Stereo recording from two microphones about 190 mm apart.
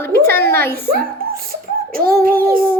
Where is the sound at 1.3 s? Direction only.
50° right (ahead or behind).